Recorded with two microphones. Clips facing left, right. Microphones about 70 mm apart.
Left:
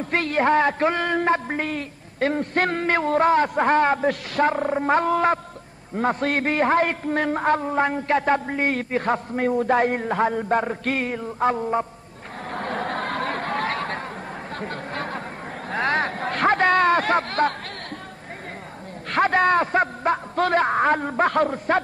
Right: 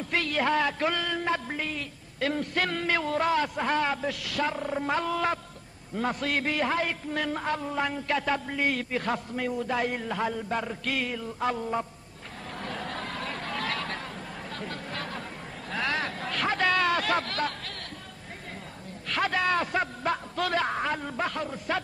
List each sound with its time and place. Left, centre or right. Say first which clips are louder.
0.0 s a man's voice: left 6 dB; left
12.5 s chatter: left 9 dB; left
14.6 s a sound: left 6 dB; left
19.0 s a man's voice: left 8 dB; left